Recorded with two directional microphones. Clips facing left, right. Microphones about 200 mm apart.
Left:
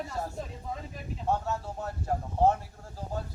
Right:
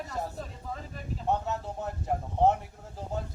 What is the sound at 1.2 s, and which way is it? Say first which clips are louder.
Speech: even; 20° right (ahead or behind).